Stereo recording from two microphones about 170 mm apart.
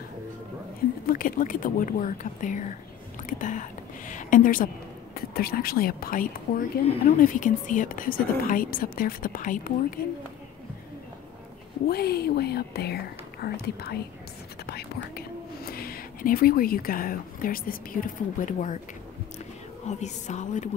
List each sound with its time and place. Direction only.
1.0 s speech: 55° left (ahead or behind)
11.9 s speech: 65° left (ahead or behind); by 18.8 s 50° left (ahead or behind)
19.9 s speech: 45° left (ahead or behind)